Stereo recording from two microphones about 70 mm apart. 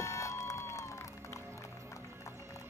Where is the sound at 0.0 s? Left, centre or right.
Left.